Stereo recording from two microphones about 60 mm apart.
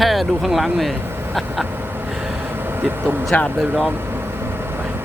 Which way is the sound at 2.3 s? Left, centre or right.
Right.